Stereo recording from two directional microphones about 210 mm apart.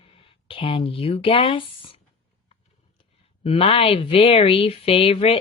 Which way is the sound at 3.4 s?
25° left (ahead or behind).